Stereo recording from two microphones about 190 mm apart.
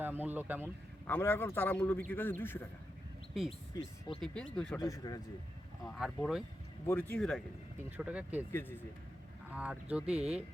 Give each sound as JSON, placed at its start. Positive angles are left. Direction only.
{"t": 0.0, "sound": "speech", "side_deg": -10}
{"t": 1.0, "sound": "a man's voice", "side_deg": 10}
{"t": 4.2, "sound": "speech", "side_deg": 5}
{"t": 4.8, "sound": "speech", "side_deg": 20}
{"t": 5.8, "sound": "a man's voice", "side_deg": 0}
{"t": 7.9, "sound": "speech", "side_deg": -5}
{"t": 9.6, "sound": "speech", "side_deg": -5}